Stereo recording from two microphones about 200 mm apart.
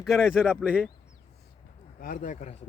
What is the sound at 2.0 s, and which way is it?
Speech, 45° left (ahead or behind).